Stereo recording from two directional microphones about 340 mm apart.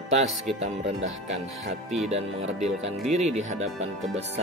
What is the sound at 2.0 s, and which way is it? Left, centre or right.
Speech, centre.